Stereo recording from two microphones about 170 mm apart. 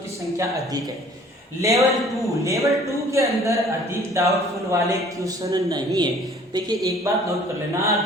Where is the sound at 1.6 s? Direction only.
20° right (ahead or behind).